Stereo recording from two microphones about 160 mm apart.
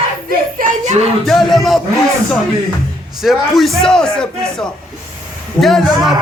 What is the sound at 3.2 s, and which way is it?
Speech, centre (ahead or behind).